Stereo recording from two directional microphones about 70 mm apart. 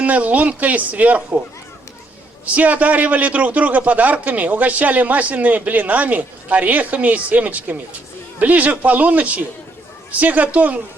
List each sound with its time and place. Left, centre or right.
0.0 s a man's voice: right
2.6 s a man's voice: right